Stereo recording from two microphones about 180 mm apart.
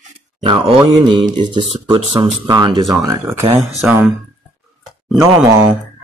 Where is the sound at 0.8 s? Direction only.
25° right (ahead or behind).